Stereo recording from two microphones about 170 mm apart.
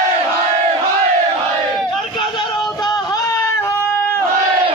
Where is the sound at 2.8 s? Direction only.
20° left (ahead or behind).